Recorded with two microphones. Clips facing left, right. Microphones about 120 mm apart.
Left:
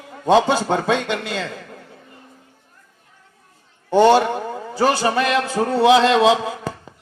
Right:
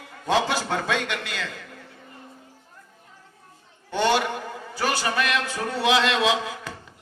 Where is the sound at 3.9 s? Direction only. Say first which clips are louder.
Left 9 dB; 35° left (ahead or behind).